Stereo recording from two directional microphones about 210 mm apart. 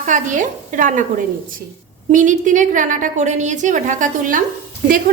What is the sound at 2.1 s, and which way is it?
A woman's voice, 40° right (ahead or behind).